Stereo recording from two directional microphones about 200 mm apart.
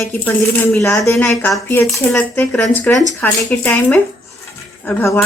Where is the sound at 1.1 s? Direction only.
Centre (ahead or behind).